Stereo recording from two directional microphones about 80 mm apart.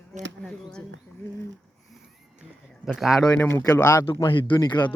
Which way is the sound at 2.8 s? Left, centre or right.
Centre.